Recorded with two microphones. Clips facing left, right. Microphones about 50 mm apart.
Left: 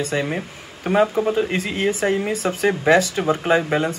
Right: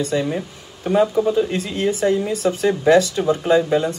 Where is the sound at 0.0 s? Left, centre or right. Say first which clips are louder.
Right 2 dB; left.